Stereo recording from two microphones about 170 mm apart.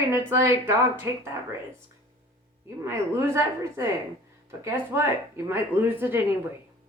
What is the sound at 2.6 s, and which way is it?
Speech, 15° right (ahead or behind).